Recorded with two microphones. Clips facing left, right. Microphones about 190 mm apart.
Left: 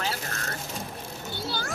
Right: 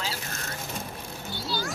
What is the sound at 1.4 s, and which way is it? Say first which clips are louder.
Children playing: right 2 dB; 55° left (ahead or behind).